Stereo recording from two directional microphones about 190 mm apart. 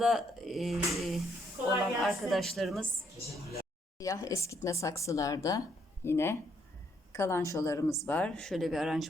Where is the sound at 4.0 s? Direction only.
15° left (ahead or behind).